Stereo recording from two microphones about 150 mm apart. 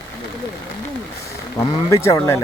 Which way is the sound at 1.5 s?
20° left (ahead or behind).